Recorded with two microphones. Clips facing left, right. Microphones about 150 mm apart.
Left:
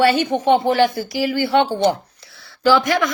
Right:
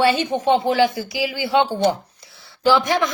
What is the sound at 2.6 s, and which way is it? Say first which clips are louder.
Speech: left 2 dB; 20° right (ahead or behind).